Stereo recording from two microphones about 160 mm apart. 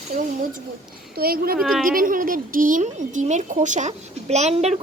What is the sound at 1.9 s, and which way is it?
A woman's voice, 60° right (ahead or behind).